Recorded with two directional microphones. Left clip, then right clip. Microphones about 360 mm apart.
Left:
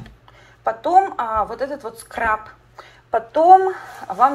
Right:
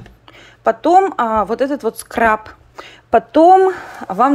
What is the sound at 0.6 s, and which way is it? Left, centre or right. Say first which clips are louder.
Speech: right 4 dB; right.